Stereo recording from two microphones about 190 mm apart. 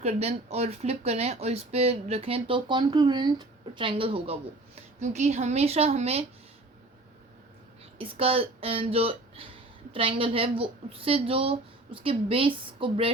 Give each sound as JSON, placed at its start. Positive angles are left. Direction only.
{"t": 0.0, "sound": "speech", "side_deg": -35}
{"t": 7.9, "sound": "a woman's voice", "side_deg": -30}